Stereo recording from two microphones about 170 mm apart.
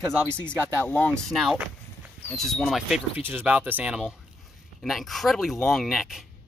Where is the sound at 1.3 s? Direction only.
5° right (ahead or behind).